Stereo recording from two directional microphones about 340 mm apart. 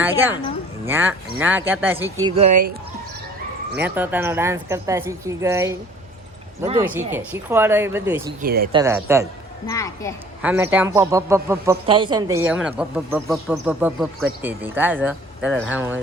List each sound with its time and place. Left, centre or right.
0.0 s speech: centre
3.8 s speech: centre
8.4 s speech: right
8.7 s speech: centre
9.6 s a child's voice: centre
10.4 s speech: centre